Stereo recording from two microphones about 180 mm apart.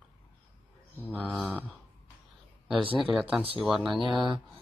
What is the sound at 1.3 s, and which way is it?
Speech, 10° right (ahead or behind).